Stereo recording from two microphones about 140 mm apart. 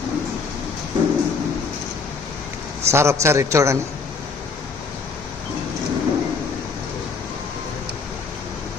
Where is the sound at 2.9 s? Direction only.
20° right (ahead or behind).